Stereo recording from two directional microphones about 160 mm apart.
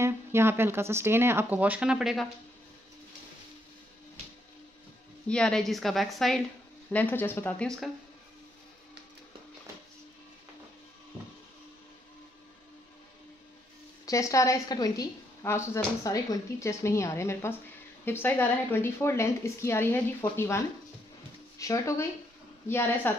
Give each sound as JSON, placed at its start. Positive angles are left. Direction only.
{"t": 0.0, "sound": "speech", "side_deg": -15}
{"t": 5.3, "sound": "a woman's voice", "side_deg": 5}
{"t": 14.0, "sound": "a woman's voice", "side_deg": 20}